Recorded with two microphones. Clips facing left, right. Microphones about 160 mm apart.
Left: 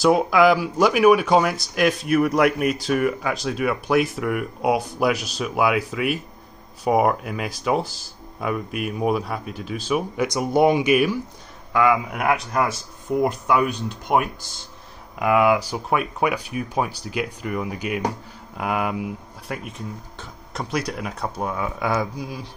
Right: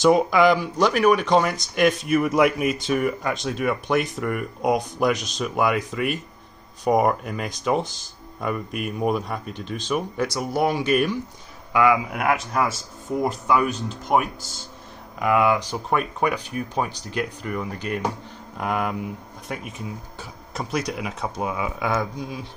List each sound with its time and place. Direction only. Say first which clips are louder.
0.0 s speech: even; centre (ahead or behind)
10.2 s speech: left 6 dB; 20° left (ahead or behind)
11.7 s speech: even; 10° right (ahead or behind)
12.1 s speech: left 1 dB; centre (ahead or behind)